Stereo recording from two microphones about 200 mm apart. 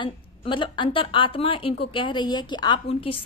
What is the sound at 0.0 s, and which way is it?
A woman's voice, 25° left (ahead or behind).